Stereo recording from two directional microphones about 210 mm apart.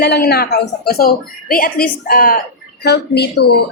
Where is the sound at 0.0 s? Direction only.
50° left (ahead or behind).